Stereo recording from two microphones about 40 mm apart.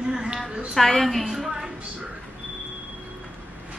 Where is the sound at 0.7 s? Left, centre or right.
Centre.